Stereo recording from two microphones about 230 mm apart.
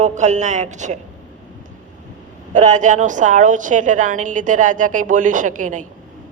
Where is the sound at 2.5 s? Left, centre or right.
Right.